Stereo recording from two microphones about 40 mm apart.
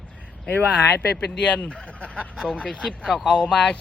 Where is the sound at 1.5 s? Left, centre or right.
Left.